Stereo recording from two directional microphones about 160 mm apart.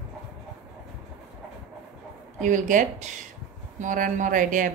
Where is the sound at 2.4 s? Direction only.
50° right (ahead or behind).